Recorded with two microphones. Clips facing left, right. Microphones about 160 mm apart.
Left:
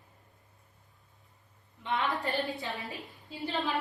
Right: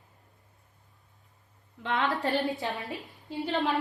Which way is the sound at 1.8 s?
90° right.